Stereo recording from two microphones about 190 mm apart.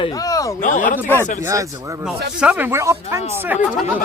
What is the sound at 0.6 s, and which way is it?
Speech, 40° left (ahead or behind).